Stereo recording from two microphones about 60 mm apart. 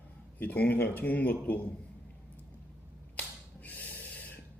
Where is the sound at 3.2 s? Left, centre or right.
Left.